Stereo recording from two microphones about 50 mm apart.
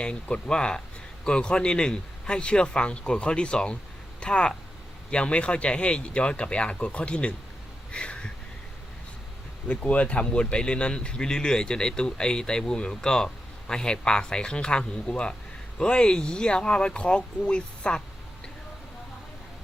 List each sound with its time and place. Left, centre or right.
0.0 s a man's voice: left
7.9 s a sound: left
9.6 s speech: left